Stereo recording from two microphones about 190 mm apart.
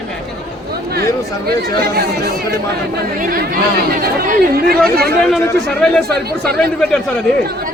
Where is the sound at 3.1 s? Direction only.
50° right (ahead or behind).